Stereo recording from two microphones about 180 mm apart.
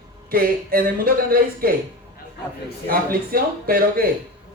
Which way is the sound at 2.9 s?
55° right (ahead or behind).